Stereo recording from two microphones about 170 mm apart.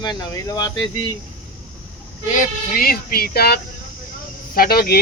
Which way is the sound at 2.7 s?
60° left (ahead or behind).